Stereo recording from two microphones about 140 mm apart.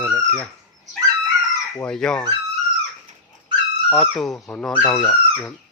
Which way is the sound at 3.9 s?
Centre (ahead or behind).